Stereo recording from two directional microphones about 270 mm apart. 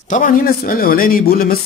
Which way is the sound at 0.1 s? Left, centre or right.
Left.